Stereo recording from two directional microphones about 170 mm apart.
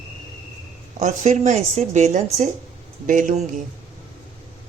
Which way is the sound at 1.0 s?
45° right (ahead or behind).